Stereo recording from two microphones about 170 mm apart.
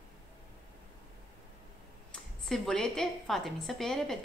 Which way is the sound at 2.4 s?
5° left (ahead or behind).